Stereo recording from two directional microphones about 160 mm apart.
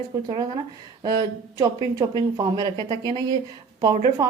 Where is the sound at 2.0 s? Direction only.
25° right (ahead or behind).